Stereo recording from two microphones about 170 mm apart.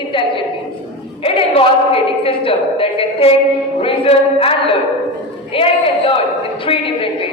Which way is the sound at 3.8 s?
35° left (ahead or behind).